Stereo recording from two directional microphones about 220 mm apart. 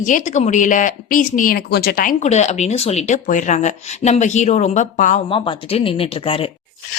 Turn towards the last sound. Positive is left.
turn(degrees=25)  # may be behind; listen again after turning